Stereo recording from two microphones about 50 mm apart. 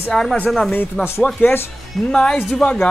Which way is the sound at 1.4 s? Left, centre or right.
Left.